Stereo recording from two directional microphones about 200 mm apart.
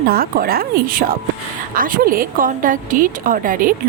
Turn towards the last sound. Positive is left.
turn(degrees=-45)  # may be behind; listen again after turning